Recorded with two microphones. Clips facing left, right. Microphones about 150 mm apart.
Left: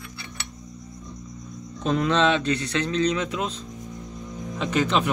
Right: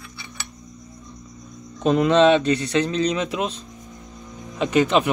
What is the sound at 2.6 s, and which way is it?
Speech, 35° right (ahead or behind).